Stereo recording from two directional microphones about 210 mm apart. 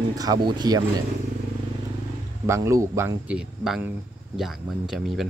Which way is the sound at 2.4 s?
15° right (ahead or behind).